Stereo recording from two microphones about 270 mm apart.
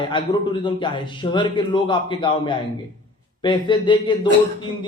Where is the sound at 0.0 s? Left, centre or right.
Centre.